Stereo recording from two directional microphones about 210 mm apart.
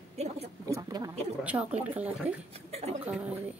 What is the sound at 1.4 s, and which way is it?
Speech, 5° right (ahead or behind).